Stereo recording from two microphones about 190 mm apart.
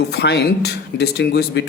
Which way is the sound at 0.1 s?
60° left (ahead or behind).